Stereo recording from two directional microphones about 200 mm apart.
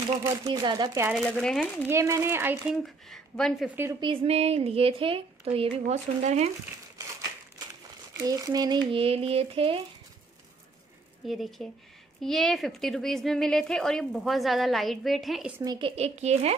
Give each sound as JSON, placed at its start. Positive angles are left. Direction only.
{"t": 0.2, "sound": "speech", "side_deg": -20}
{"t": 1.1, "sound": "a woman's voice", "side_deg": 0}
{"t": 1.9, "sound": "speech", "side_deg": -15}
{"t": 2.8, "sound": "a woman's voice", "side_deg": 0}
{"t": 4.0, "sound": "speech", "side_deg": -25}
{"t": 8.3, "sound": "speech", "side_deg": -20}
{"t": 11.2, "sound": "a woman's voice", "side_deg": 0}
{"t": 15.6, "sound": "speech", "side_deg": -20}
{"t": 16.0, "sound": "speech", "side_deg": -35}